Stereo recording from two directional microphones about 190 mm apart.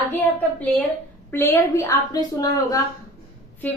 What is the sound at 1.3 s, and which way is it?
A woman's voice, 15° left (ahead or behind).